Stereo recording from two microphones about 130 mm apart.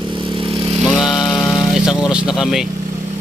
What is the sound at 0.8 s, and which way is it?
Motorcycle, centre (ahead or behind).